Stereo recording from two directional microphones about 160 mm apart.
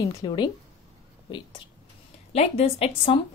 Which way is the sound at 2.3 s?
40° left (ahead or behind).